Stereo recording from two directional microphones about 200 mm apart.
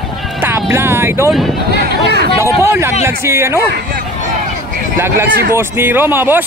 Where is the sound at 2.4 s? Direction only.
15° right (ahead or behind).